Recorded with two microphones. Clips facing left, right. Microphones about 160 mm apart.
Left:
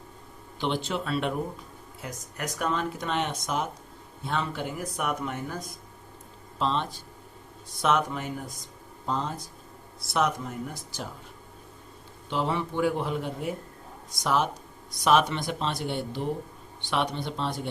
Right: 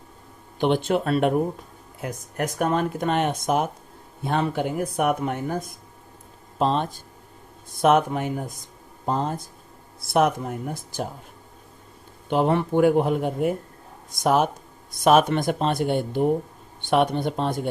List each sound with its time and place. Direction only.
0.6 s speech: 55° right (ahead or behind)
12.3 s speech: 55° right (ahead or behind)